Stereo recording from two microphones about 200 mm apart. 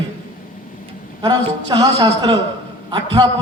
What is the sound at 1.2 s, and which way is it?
A man's voice, 20° right (ahead or behind).